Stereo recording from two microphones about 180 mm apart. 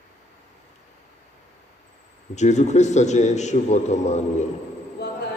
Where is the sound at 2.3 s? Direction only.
40° left (ahead or behind).